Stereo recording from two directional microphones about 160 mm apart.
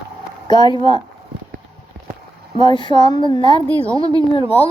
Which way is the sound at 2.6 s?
30° left (ahead or behind).